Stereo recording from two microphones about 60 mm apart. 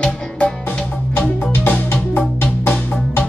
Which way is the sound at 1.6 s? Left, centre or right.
Left.